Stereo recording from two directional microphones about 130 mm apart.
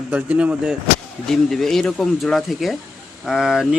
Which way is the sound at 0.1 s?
10° right (ahead or behind).